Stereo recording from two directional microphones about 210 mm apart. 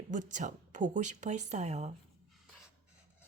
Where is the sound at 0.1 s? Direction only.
35° right (ahead or behind).